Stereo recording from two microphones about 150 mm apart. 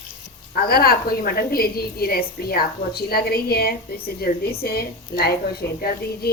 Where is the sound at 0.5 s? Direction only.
85° left.